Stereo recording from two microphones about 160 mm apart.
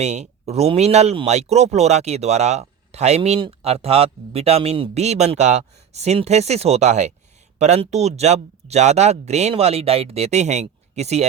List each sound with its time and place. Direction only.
0.0 s speech: 45° right (ahead or behind)